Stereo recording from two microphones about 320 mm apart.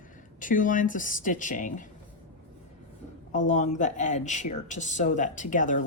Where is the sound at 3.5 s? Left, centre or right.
Left.